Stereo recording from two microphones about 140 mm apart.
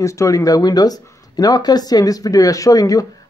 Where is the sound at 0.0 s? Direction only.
20° left (ahead or behind).